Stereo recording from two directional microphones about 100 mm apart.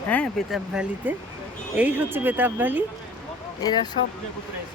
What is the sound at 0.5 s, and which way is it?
Speech, 10° right (ahead or behind).